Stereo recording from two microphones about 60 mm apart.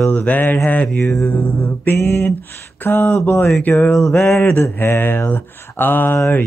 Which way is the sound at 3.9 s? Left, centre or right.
Centre.